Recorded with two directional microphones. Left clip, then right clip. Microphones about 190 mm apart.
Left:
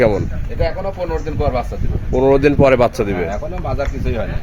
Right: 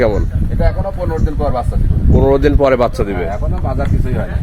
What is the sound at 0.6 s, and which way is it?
Speech, 25° left (ahead or behind).